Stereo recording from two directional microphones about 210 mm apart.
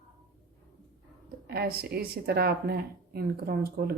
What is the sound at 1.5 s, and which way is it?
Speech, 50° right (ahead or behind).